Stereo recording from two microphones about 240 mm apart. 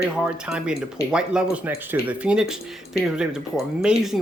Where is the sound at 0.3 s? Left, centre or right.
Centre.